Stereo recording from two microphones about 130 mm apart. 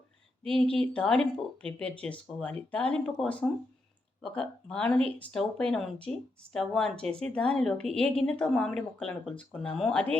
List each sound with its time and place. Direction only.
0.4 s speech: 5° left (ahead or behind)